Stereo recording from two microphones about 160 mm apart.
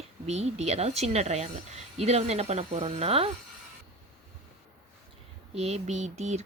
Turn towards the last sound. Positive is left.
turn(degrees=-45)  # may be behind; listen again after turning